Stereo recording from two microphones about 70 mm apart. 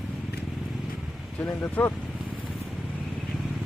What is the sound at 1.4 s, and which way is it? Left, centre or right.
Speech, left.